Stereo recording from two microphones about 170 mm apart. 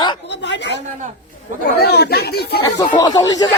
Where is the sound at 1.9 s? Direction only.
70° left (ahead or behind).